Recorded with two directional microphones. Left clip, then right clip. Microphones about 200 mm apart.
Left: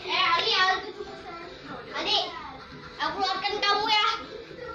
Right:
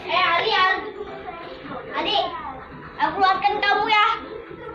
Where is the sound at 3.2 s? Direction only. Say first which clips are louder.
Right 9 dB; 20° left (ahead or behind).